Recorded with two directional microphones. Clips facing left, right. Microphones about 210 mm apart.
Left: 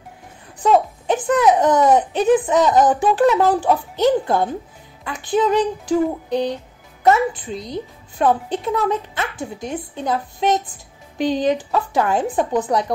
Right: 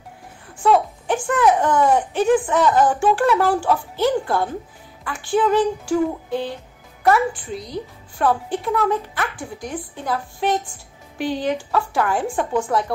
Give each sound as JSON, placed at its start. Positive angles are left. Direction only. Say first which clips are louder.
{"t": 0.6, "sound": "a child's voice", "louder": "left 1 dB", "side_deg": 20}